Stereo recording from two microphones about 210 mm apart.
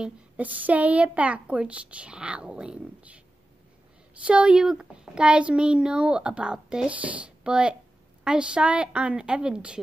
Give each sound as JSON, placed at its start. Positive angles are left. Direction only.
{"t": 0.0, "sound": "a child's voice", "side_deg": -10}